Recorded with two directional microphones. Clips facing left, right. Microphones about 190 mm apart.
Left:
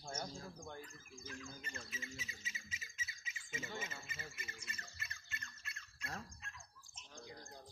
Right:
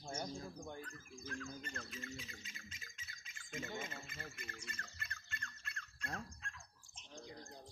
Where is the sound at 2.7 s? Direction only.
5° left (ahead or behind).